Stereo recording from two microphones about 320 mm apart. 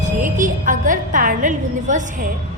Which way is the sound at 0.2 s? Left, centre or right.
Right.